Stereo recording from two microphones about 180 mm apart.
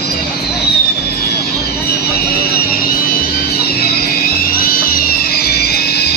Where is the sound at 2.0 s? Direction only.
60° left (ahead or behind).